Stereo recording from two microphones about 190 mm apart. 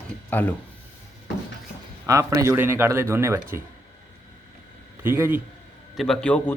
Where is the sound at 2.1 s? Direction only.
15° right (ahead or behind).